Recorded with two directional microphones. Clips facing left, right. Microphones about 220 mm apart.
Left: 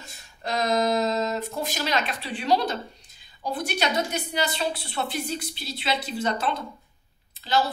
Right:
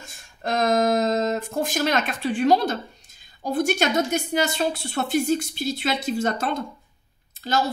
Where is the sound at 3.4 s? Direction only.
45° right (ahead or behind).